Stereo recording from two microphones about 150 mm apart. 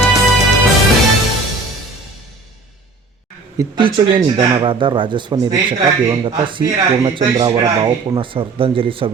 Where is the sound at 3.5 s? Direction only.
30° right (ahead or behind).